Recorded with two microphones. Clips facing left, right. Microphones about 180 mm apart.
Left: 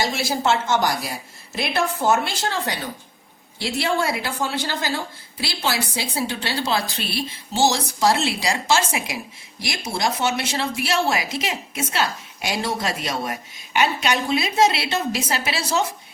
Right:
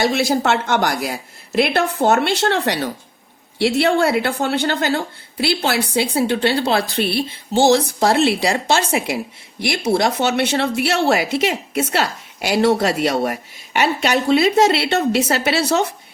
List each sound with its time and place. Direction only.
0.0 s a woman's voice: 60° right (ahead or behind)